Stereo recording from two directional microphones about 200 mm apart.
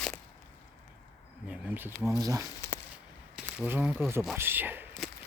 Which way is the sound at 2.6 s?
15° left (ahead or behind).